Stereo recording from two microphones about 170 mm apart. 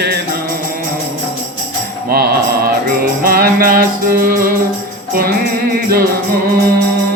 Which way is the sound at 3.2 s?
60° right (ahead or behind).